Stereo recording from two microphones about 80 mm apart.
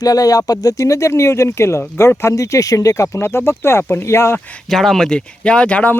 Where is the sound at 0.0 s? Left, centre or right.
Left.